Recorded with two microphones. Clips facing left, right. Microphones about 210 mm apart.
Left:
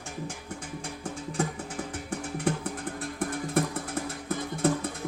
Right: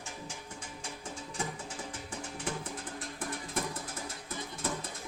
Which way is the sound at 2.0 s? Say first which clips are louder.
Left 10 dB; 60° left (ahead or behind).